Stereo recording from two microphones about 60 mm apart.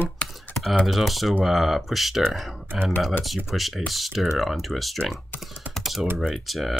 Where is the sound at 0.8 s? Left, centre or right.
Centre.